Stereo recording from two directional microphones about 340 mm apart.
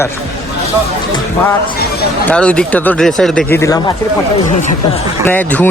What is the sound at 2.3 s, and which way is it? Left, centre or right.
Speech, centre.